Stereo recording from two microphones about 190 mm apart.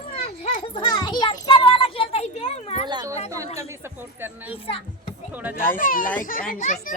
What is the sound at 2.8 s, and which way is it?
Speech, 20° right (ahead or behind).